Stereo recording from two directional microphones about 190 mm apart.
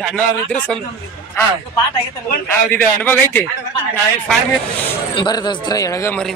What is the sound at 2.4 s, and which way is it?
Speech, 10° left (ahead or behind).